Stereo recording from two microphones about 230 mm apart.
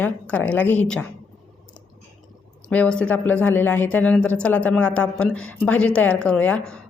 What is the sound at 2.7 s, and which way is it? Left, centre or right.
A woman's voice, centre.